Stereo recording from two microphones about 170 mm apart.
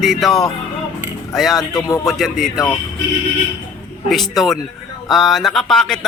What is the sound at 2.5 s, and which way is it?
Speech, 15° left (ahead or behind).